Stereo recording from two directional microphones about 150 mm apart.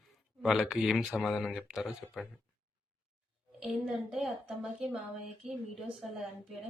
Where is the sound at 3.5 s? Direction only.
5° right (ahead or behind).